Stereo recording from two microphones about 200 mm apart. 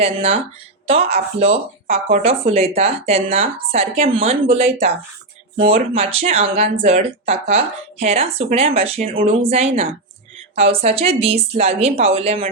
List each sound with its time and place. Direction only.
0.0 s speech: 30° right (ahead or behind)